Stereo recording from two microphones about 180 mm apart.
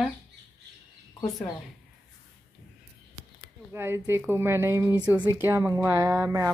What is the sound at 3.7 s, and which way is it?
A woman's voice, 15° right (ahead or behind).